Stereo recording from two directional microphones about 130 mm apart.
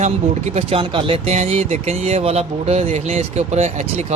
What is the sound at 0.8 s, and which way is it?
Speech, 40° right (ahead or behind).